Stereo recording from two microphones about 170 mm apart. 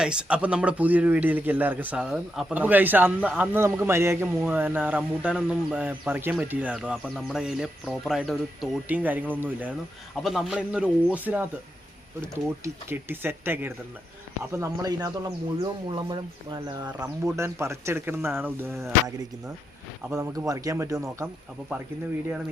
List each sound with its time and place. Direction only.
0.0 s a man's voice: 5° right (ahead or behind); by 16.9 s 25° right (ahead or behind)
17.2 s a man's voice: 15° right (ahead or behind)